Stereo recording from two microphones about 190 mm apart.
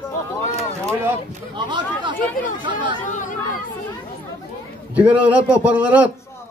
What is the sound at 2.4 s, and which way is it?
Speech, 45° left (ahead or behind).